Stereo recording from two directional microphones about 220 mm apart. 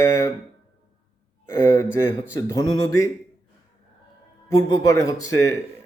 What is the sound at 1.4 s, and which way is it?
Speech, 10° left (ahead or behind).